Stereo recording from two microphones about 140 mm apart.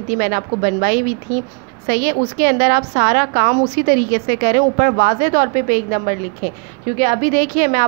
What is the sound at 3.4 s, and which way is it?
A woman's voice, 90° right.